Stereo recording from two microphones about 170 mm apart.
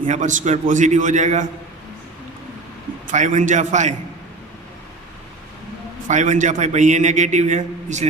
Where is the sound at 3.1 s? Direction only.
45° right (ahead or behind).